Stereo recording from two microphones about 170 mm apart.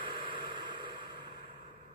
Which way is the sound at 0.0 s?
30° right (ahead or behind).